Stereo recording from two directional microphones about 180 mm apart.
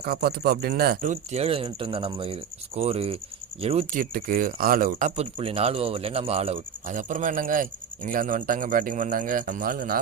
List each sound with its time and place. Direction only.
0.0 s speech: 60° right (ahead or behind); by 3.8 s 30° right (ahead or behind)
3.9 s speech: 50° right (ahead or behind)